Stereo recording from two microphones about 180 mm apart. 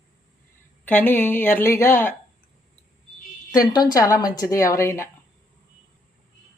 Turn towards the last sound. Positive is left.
turn(degrees=15)  # may be behind; listen again after turning